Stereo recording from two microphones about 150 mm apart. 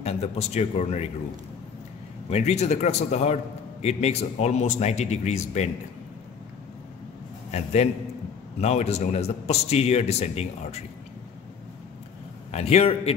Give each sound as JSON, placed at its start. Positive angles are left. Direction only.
{"t": 0.0, "sound": "a man's voice", "side_deg": 45}
{"t": 2.2, "sound": "a man's voice", "side_deg": 45}
{"t": 7.5, "sound": "a man's voice", "side_deg": 50}
{"t": 12.4, "sound": "a man's voice", "side_deg": 45}